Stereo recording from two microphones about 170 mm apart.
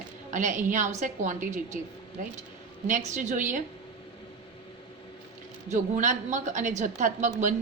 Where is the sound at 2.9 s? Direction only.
50° right (ahead or behind).